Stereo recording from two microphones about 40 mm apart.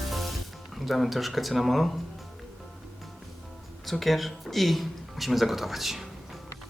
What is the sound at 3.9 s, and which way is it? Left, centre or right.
Speech, centre.